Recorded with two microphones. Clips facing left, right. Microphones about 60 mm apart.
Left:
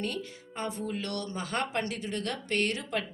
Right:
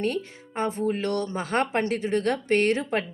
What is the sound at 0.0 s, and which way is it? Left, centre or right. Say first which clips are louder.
A woman's voice: right 7 dB; right.